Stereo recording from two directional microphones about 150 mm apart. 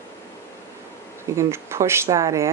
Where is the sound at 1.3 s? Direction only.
15° right (ahead or behind).